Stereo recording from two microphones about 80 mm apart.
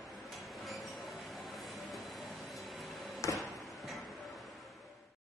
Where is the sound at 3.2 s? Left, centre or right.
Left.